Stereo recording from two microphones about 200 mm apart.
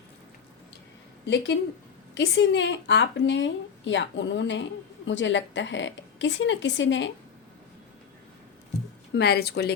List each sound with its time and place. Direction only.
1.2 s a woman's voice: 60° left (ahead or behind)
9.1 s a woman's voice: 55° left (ahead or behind)